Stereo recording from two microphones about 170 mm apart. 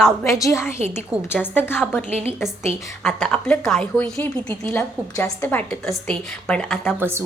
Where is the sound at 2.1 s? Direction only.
40° right (ahead or behind).